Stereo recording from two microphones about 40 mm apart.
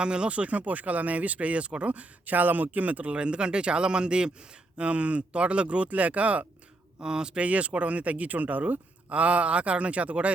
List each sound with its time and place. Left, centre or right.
0.0 s speech: right
7.0 s speech: right
7.4 s speech: right